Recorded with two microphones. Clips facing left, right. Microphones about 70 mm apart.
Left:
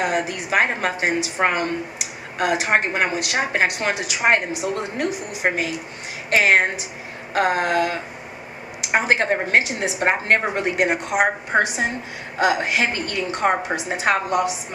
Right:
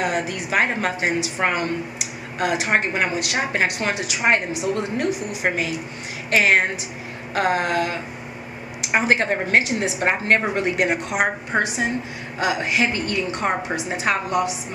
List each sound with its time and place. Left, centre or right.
0.0 s a woman's voice: left
13.3 s speech: left
14.0 s a woman's voice: left